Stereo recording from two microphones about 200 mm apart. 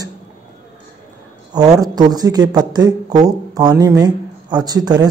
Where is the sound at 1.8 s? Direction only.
20° right (ahead or behind).